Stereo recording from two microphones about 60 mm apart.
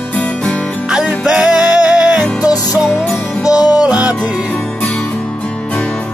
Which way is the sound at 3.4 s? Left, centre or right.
Left.